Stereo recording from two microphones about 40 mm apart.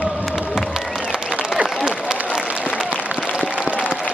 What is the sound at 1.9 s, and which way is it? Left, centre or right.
Applause, right.